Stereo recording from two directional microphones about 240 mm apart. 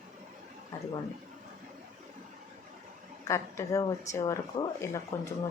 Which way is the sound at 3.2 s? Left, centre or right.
Centre.